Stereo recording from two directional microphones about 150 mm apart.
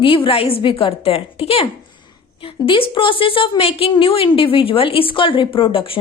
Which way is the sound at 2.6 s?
35° left (ahead or behind).